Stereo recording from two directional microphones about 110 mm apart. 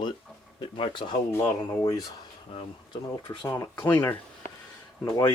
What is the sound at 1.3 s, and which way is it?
Speech, 25° left (ahead or behind).